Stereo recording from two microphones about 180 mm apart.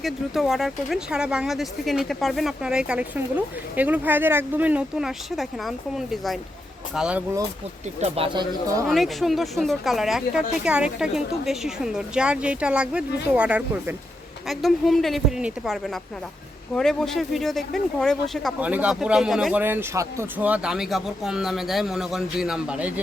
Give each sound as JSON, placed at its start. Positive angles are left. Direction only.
{"t": 0.0, "sound": "speech", "side_deg": 0}
{"t": 8.0, "sound": "speech", "side_deg": -30}
{"t": 8.9, "sound": "speech", "side_deg": 0}
{"t": 18.6, "sound": "speech", "side_deg": -5}